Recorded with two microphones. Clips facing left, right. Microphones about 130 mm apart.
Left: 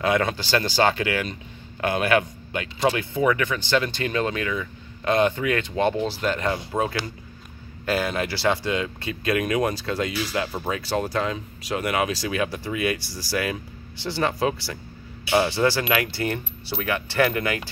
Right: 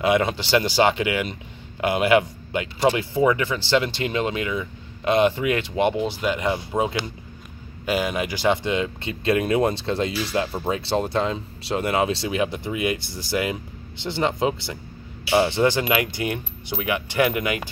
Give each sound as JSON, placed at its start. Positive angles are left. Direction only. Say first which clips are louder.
{"t": 0.0, "sound": "speech", "louder": "right 2 dB", "side_deg": -20}